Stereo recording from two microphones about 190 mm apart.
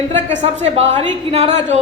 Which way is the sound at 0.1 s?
35° right (ahead or behind).